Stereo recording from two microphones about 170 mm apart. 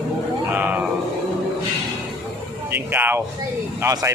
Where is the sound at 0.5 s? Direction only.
10° right (ahead or behind).